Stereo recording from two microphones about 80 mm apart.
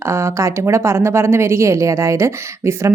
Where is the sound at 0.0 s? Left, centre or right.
Right.